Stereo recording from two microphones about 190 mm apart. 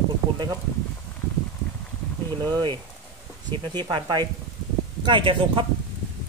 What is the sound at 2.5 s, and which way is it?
Speech, 25° right (ahead or behind).